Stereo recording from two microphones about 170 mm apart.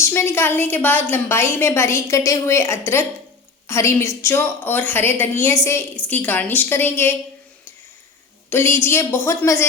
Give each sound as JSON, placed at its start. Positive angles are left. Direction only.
{"t": 0.0, "sound": "a woman's voice", "side_deg": 15}
{"t": 8.4, "sound": "a woman's voice", "side_deg": 15}